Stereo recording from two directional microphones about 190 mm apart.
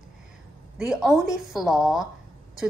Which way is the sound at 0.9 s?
5° right (ahead or behind).